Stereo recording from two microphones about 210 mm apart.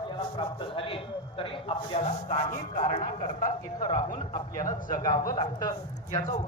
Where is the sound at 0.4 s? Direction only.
25° left (ahead or behind).